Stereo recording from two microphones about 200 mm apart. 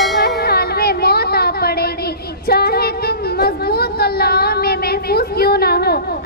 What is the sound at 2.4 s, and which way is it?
Child singing, 50° left (ahead or behind).